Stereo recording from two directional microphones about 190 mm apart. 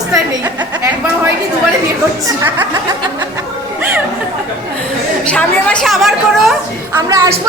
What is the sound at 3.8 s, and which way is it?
Speech, 10° right (ahead or behind).